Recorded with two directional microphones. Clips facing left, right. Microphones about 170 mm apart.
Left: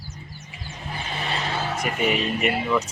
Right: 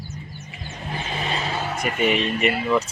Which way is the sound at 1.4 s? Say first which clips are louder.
Right 1 dB; 5° right (ahead or behind).